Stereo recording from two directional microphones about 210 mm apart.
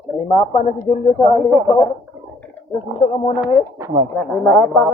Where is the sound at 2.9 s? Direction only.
30° left (ahead or behind).